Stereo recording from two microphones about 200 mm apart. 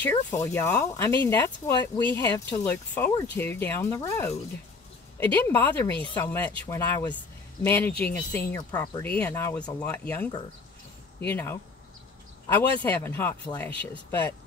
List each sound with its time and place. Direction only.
0.0 s speech: 10° left (ahead or behind)